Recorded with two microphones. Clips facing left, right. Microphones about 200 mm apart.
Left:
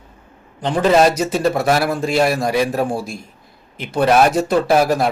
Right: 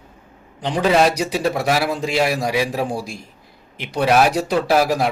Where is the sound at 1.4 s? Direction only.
10° right (ahead or behind).